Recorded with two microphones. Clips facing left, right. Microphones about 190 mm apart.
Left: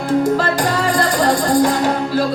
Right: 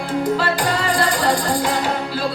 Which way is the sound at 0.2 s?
45° left (ahead or behind).